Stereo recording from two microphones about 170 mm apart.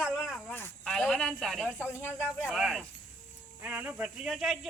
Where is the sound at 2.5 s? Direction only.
Centre (ahead or behind).